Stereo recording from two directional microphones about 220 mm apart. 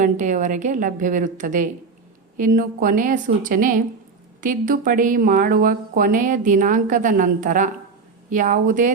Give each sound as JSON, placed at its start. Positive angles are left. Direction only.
{"t": 0.0, "sound": "speech", "side_deg": -35}